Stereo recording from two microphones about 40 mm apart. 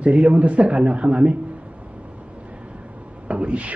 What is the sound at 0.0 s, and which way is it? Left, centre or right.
Speech, right.